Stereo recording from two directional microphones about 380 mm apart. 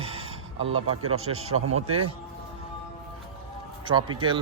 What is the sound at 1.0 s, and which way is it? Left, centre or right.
Speech, right.